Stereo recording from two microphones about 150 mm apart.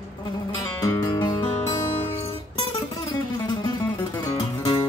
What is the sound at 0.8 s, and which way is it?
Music, 25° left (ahead or behind).